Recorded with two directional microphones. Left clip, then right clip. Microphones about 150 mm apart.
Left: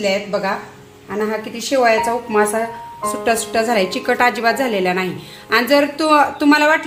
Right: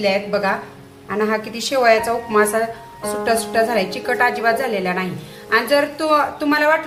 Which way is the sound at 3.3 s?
50° left (ahead or behind).